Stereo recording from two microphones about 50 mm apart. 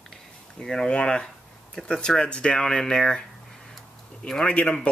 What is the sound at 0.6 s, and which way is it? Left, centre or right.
Speech, centre.